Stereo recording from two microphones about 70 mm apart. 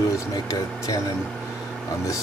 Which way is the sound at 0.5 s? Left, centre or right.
Left.